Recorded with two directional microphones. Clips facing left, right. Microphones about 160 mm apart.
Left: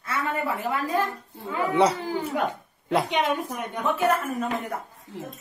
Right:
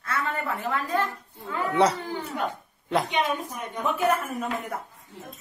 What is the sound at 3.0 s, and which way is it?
Speech, 70° left (ahead or behind).